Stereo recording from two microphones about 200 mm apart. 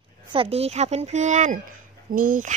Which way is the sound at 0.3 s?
30° right (ahead or behind).